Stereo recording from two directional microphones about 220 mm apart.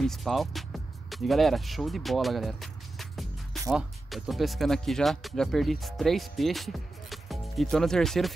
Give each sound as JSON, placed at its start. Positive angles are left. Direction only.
{"t": 0.0, "sound": "speech", "side_deg": 0}